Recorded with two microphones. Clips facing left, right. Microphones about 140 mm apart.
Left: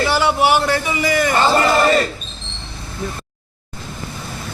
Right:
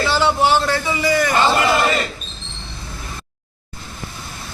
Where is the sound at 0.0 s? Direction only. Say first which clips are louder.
Left 1 dB; 15° left (ahead or behind).